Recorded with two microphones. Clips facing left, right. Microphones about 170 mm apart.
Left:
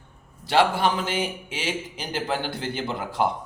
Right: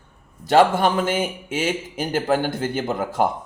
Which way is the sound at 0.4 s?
45° right (ahead or behind).